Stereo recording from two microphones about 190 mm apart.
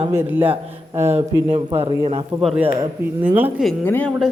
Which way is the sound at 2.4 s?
5° right (ahead or behind).